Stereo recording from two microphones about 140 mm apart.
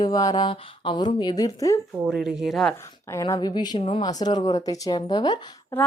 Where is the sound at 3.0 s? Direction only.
20° left (ahead or behind).